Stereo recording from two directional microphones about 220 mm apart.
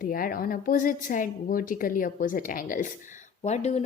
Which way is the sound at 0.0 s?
40° left (ahead or behind).